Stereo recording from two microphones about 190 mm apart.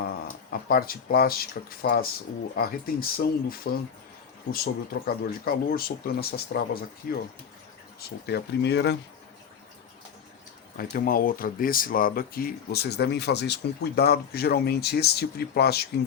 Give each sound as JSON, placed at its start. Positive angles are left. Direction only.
{"t": 0.5, "sound": "speech", "side_deg": 50}
{"t": 10.8, "sound": "speech", "side_deg": 50}